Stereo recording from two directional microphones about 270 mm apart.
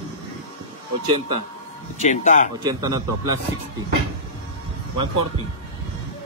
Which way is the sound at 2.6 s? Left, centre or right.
Centre.